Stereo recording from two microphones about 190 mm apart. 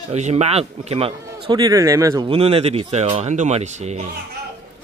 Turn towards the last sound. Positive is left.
turn(degrees=-35)  # may be behind; listen again after turning